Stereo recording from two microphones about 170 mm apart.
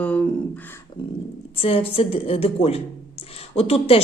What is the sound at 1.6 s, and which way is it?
A woman's voice, 35° left (ahead or behind).